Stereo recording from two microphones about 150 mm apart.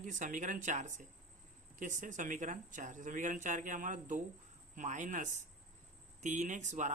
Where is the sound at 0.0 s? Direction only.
60° right (ahead or behind).